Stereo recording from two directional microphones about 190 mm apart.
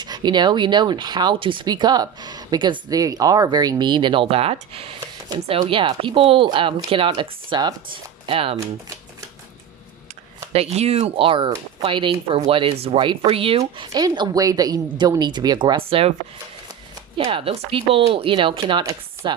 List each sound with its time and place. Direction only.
0.0 s speech: 20° right (ahead or behind)
10.5 s speech: 30° right (ahead or behind)
17.2 s speech: 30° right (ahead or behind)